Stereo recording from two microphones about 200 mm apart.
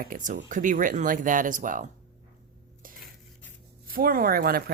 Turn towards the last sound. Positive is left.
turn(degrees=-50)  # may be behind; listen again after turning